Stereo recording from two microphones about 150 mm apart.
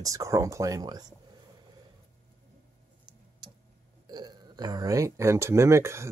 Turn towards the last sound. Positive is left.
turn(degrees=-20)  # may be behind; listen again after turning